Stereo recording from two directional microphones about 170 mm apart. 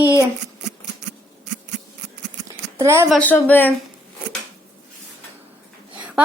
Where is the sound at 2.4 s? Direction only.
15° right (ahead or behind).